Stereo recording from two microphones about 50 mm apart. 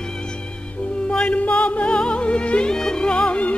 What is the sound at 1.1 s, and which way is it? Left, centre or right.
Music, left.